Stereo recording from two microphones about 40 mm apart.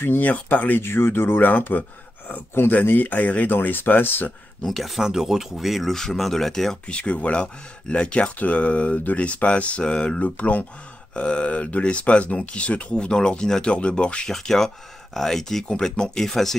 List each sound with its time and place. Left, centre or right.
0.2 s speech: left
0.8 s speech: left
1.8 s speech: left
3.5 s speech: left
4.6 s speech: centre
5.0 s speech: centre
6.9 s speech: left
10.2 s speech: left
12.9 s speech: left
14.3 s speech: centre
16.2 s speech: centre